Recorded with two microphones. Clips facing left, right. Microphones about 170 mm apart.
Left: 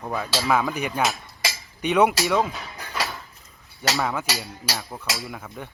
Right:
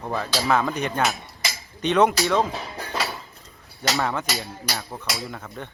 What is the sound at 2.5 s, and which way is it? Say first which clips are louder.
Cutlery: right 4 dB; 35° right (ahead or behind).